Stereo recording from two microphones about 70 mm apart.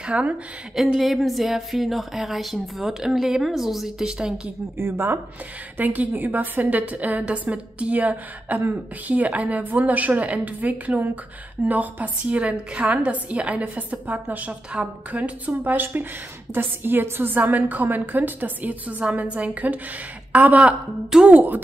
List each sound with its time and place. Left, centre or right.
0.0 s a woman's voice: centre
0.7 s speech: centre
4.7 s a woman's voice: right